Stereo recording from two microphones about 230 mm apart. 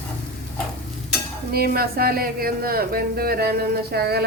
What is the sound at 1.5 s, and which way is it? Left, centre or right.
Speech, right.